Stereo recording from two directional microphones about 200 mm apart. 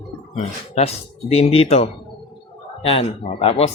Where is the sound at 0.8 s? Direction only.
30° left (ahead or behind).